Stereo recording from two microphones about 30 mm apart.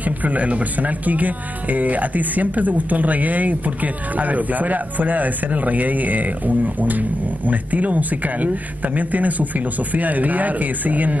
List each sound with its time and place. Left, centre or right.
0.0 s speech: right